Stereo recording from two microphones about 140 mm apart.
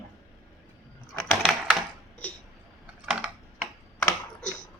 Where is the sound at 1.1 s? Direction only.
Centre (ahead or behind).